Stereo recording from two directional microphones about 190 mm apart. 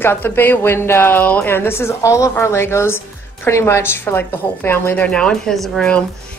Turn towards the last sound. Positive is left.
turn(degrees=5)  # may be behind; listen again after turning